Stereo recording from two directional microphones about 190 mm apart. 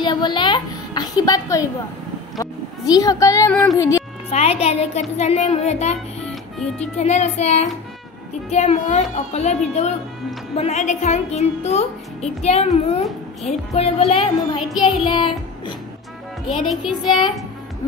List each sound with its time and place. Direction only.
0.0 s a woman's voice: 25° left (ahead or behind)
4.3 s speech: 35° left (ahead or behind)
7.0 s speech: 35° left (ahead or behind)
15.0 s child singing: 25° left (ahead or behind)
16.6 s child singing: centre (ahead or behind)